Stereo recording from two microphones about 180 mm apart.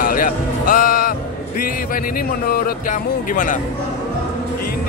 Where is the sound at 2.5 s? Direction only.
50° left (ahead or behind).